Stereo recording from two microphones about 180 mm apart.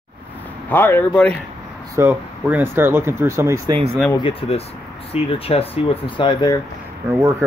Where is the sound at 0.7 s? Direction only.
10° left (ahead or behind).